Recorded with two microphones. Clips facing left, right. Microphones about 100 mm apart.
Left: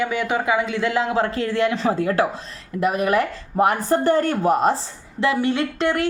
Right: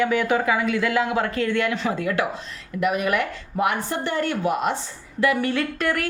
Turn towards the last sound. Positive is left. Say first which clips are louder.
# left 3 dB
turn(degrees=25)  # may be behind; listen again after turning